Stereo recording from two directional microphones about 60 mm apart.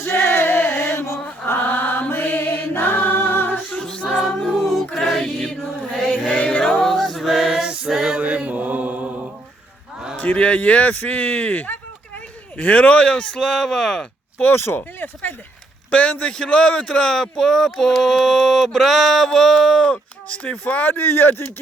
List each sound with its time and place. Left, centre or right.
0.1 s music: left
1.5 s chant: left
3.7 s music: centre
7.7 s music: centre
8.2 s mantra: right
10.2 s speech: left
14.4 s speech: left
15.9 s speech: left
20.4 s speech: left